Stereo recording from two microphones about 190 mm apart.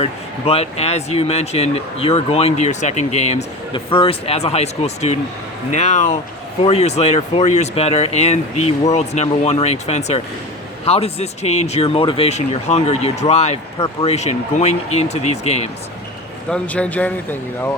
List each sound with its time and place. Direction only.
0.0 s speech: 35° left (ahead or behind)
16.5 s a man's voice: 5° left (ahead or behind)